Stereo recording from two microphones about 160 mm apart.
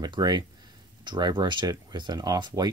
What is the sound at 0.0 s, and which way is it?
Speech, 25° right (ahead or behind).